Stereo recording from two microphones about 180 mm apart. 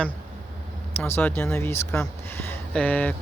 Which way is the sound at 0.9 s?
10° left (ahead or behind).